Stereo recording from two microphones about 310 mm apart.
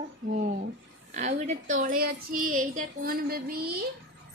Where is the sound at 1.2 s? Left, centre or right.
Right.